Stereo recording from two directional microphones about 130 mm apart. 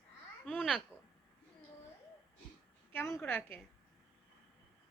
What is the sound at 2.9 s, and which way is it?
Speech, 20° left (ahead or behind).